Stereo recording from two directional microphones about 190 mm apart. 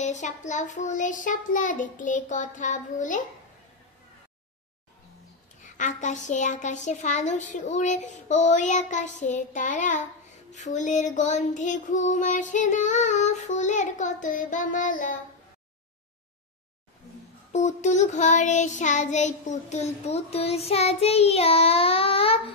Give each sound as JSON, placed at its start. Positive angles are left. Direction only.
{"t": 0.0, "sound": "child singing", "side_deg": 40}
{"t": 5.6, "sound": "child singing", "side_deg": 40}
{"t": 17.5, "sound": "child singing", "side_deg": 40}